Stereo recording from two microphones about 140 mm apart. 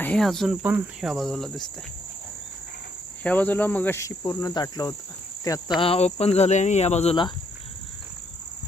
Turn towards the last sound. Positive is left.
turn(degrees=50)  # may be behind; listen again after turning